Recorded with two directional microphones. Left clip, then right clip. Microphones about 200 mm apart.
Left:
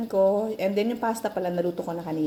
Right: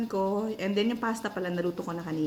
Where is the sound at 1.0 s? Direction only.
15° right (ahead or behind).